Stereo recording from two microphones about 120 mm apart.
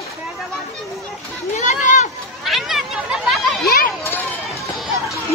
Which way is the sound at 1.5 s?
85° left.